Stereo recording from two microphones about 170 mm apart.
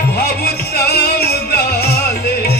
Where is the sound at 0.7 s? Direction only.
70° left (ahead or behind).